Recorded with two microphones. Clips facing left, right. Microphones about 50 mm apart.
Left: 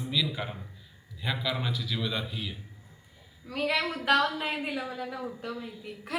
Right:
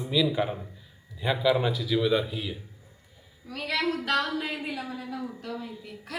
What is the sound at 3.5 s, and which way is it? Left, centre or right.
A woman's voice, centre.